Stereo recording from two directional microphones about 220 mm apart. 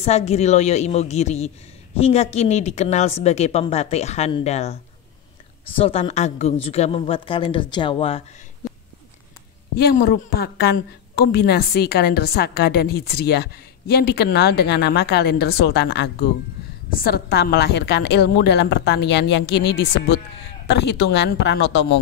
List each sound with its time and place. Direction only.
0.0 s a woman's voice: 30° left (ahead or behind)
9.8 s a woman's voice: 45° left (ahead or behind)